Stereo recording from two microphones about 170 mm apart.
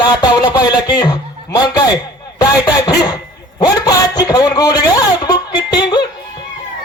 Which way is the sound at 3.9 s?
20° left (ahead or behind).